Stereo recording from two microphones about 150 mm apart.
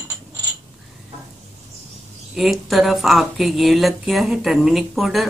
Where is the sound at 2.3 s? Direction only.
Centre (ahead or behind).